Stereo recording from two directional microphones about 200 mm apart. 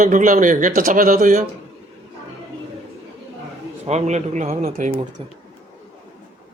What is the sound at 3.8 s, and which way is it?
A man's voice, 35° right (ahead or behind).